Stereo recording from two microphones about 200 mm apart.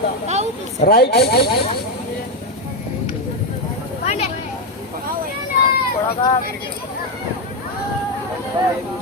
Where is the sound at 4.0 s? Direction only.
35° left (ahead or behind).